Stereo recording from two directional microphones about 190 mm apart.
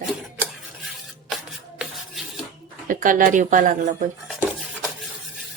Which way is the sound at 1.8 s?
Centre (ahead or behind).